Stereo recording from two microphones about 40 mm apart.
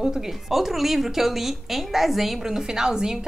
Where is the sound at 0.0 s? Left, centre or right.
Centre.